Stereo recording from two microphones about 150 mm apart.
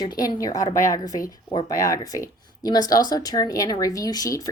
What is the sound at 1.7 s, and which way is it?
Speech, 20° left (ahead or behind).